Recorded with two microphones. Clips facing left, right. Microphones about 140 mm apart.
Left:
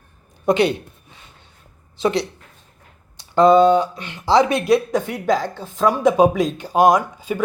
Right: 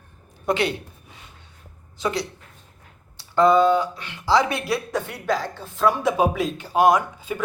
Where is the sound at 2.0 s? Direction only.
25° left (ahead or behind).